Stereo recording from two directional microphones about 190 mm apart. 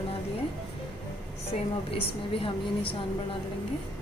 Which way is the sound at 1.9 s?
30° left (ahead or behind).